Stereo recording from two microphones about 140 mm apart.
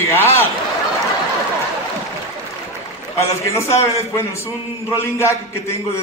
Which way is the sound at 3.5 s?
20° left (ahead or behind).